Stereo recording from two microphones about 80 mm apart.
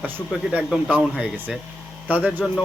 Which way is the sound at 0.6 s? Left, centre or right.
Centre.